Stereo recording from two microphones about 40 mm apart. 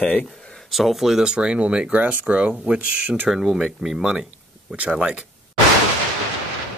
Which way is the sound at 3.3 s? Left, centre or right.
Centre.